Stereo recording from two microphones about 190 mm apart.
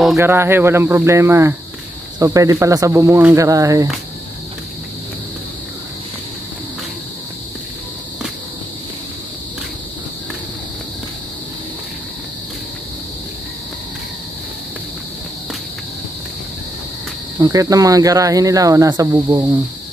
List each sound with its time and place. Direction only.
0.2 s speech: 10° right (ahead or behind)
17.4 s speech: 15° right (ahead or behind)